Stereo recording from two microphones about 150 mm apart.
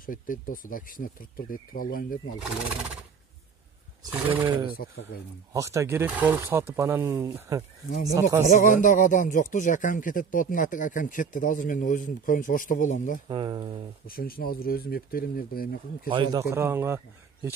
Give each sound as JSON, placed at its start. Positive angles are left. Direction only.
{"t": 0.0, "sound": "speech", "side_deg": 65}
{"t": 2.4, "sound": "speech", "side_deg": -5}
{"t": 4.8, "sound": "speech", "side_deg": 90}
{"t": 5.5, "sound": "speech", "side_deg": -20}
{"t": 8.5, "sound": "speech", "side_deg": 60}
{"t": 13.3, "sound": "speech", "side_deg": -30}
{"t": 14.0, "sound": "speech", "side_deg": 75}
{"t": 16.1, "sound": "speech", "side_deg": -30}